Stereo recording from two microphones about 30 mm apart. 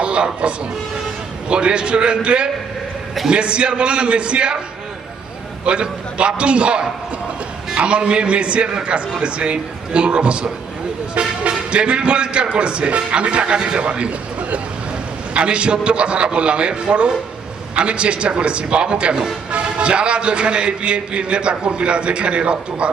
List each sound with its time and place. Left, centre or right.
0.0 s music: right
1.5 s speech: right
5.6 s speech: right